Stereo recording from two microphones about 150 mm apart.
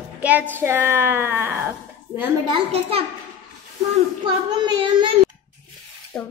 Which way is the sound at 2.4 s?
40° right (ahead or behind).